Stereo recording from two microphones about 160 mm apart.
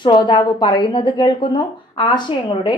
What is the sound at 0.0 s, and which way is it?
A woman's voice, 30° left (ahead or behind).